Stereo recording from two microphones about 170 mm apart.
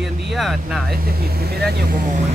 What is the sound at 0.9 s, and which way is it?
Speech, 65° right (ahead or behind).